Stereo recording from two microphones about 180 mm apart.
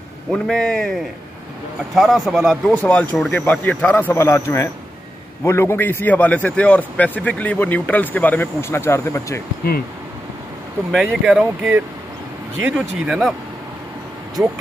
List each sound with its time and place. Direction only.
0.3 s a man's voice: 5° left (ahead or behind)
9.6 s speech: 55° left (ahead or behind)
10.9 s speech: centre (ahead or behind)
14.4 s speech: 5° right (ahead or behind)